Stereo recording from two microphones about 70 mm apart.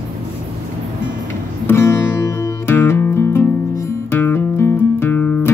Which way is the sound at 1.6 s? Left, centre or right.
Left.